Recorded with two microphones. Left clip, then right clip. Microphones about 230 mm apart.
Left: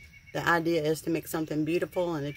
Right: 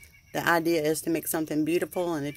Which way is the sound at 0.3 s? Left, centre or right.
Right.